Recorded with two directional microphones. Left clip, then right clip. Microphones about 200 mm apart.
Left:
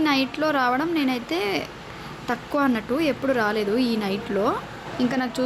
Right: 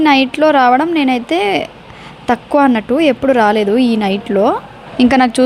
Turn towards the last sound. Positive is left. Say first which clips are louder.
# right 14 dB
turn(degrees=-45)  # may be behind; listen again after turning